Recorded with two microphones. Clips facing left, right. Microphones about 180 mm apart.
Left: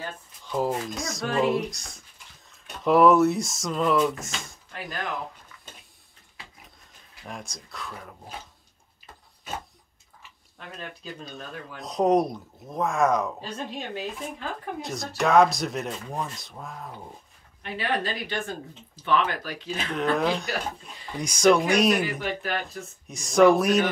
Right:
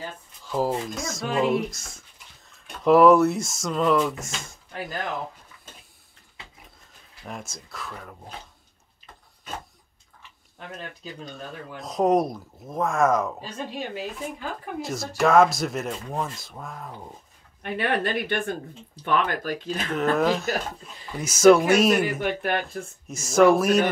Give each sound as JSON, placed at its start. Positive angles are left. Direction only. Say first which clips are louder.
{"t": 0.5, "sound": "speech", "louder": "right 1 dB", "side_deg": -5}
{"t": 7.2, "sound": "speech", "louder": "right 2 dB", "side_deg": 0}
{"t": 11.3, "sound": "speech", "louder": "right 1 dB", "side_deg": 0}
{"t": 17.6, "sound": "speech", "louder": "right 3 dB", "side_deg": -55}
{"t": 19.9, "sound": "speech", "louder": "right 2 dB", "side_deg": -5}
{"t": 22.2, "sound": "speech", "louder": "right 4 dB", "side_deg": -55}
{"t": 23.0, "sound": "speech", "louder": "even", "side_deg": 0}